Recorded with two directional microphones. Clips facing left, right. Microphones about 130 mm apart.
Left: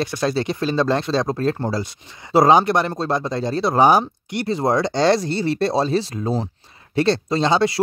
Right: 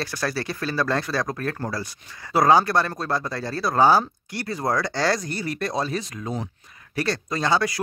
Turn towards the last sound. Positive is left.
turn(degrees=25)  # may be behind; listen again after turning